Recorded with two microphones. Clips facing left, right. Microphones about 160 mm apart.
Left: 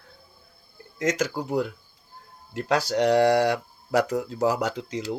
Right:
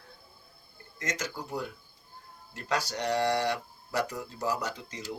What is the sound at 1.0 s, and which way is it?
Speech, 90° left.